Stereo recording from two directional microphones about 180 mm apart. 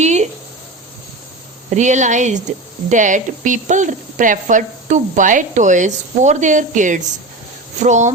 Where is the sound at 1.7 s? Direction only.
40° right (ahead or behind).